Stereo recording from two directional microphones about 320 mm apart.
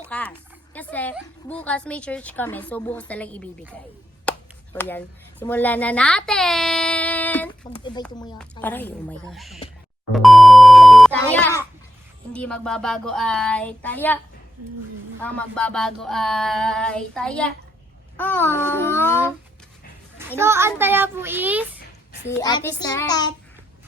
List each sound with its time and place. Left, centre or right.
0.1 s a woman's voice: centre
8.0 s child singing: centre
8.4 s a woman's voice: centre
10.1 s beep: centre
12.3 s a woman's voice: centre
15.2 s a woman's voice: centre
18.2 s child singing: centre
20.4 s child singing: centre
22.3 s child singing: centre